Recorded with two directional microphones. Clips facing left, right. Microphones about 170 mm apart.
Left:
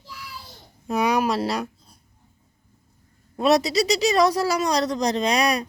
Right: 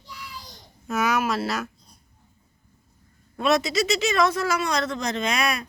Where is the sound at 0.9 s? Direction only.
30° left (ahead or behind).